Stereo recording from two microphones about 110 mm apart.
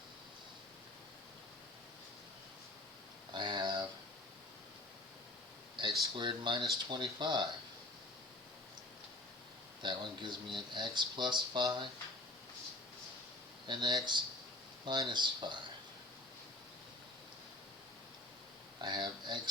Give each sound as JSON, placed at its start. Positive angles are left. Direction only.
{"t": 3.3, "sound": "a sound", "side_deg": -45}
{"t": 6.1, "sound": "speech", "side_deg": -45}
{"t": 9.8, "sound": "speech", "side_deg": -45}
{"t": 13.7, "sound": "speech", "side_deg": -45}
{"t": 18.8, "sound": "speech", "side_deg": -45}